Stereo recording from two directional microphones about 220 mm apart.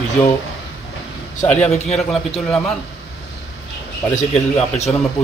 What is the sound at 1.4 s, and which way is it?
A man's voice, 5° left (ahead or behind).